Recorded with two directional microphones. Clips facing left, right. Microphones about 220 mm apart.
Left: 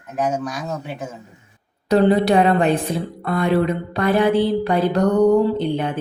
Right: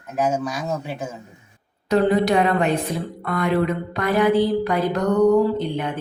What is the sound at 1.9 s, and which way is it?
Speech, 30° left (ahead or behind).